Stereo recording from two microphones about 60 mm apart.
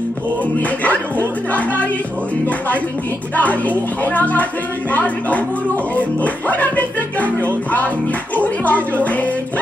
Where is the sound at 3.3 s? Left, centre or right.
Left.